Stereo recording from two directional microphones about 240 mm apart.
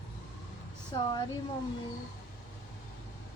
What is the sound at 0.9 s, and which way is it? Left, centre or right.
Speech, centre.